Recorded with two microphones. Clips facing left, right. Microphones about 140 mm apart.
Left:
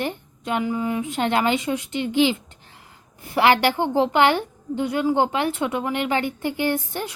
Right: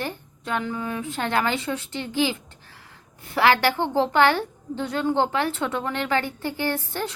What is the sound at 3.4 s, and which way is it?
A woman's voice, 15° left (ahead or behind).